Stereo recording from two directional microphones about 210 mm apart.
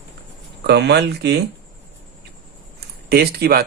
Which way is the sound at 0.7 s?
55° right (ahead or behind).